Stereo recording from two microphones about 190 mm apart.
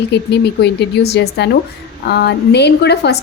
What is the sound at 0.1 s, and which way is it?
A woman's voice, 60° left (ahead or behind).